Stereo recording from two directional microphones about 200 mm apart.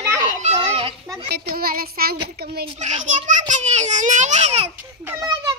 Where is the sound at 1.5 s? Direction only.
50° right (ahead or behind).